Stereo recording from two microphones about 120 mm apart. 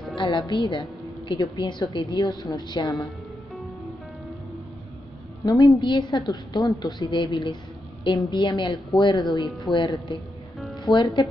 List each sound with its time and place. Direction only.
0.2 s a woman's voice: 40° left (ahead or behind)
5.4 s a woman's voice: 35° left (ahead or behind)
10.9 s a woman's voice: 40° left (ahead or behind)